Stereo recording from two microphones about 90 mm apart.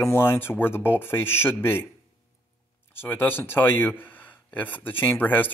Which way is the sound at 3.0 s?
25° left (ahead or behind).